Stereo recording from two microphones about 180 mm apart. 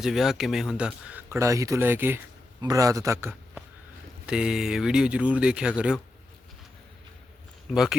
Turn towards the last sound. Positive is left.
turn(degrees=0)  # may be behind; listen again after turning